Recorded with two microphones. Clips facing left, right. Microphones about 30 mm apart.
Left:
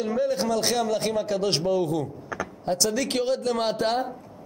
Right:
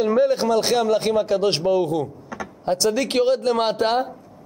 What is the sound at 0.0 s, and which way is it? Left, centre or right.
Speech, right.